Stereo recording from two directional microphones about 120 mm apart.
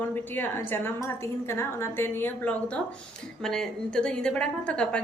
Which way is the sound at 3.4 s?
5° left (ahead or behind).